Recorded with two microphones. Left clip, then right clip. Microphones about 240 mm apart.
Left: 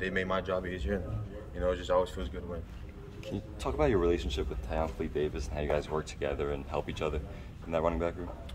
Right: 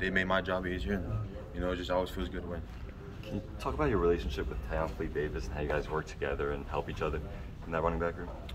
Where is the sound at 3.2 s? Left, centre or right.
Left.